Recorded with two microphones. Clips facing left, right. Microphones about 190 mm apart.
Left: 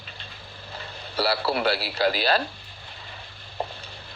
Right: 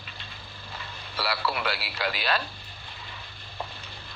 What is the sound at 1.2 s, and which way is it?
A man's voice, 35° left (ahead or behind).